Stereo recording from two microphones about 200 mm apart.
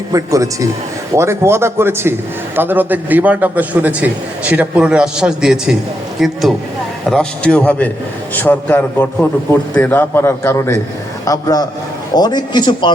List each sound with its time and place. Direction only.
0.1 s a man's voice: 15° right (ahead or behind); by 12.9 s 20° left (ahead or behind)